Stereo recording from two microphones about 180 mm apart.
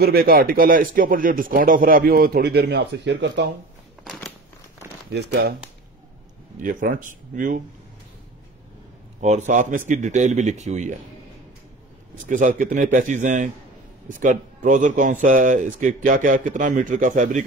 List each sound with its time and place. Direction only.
0.0 s speech: 55° right (ahead or behind); by 3.4 s 75° right (ahead or behind)
4.0 s a sound: centre (ahead or behind)
5.1 s speech: 65° right (ahead or behind)
6.6 s a man's voice: 50° right (ahead or behind)
9.2 s speech: 40° right (ahead or behind)
12.3 s a man's voice: 45° right (ahead or behind)